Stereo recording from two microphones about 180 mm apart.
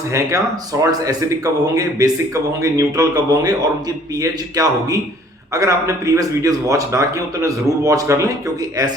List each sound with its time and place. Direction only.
0.1 s speech: 15° right (ahead or behind)